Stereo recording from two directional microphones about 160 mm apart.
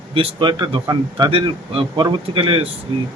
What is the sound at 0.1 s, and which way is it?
Speech, 30° right (ahead or behind).